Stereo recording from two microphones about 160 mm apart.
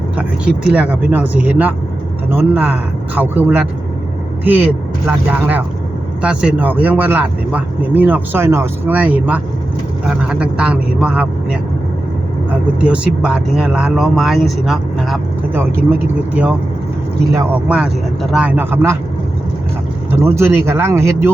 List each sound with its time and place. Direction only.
0.2 s speech: 5° right (ahead or behind)
12.8 s speech: 5° right (ahead or behind)
15.5 s speech: 10° right (ahead or behind)
20.2 s speech: 15° right (ahead or behind)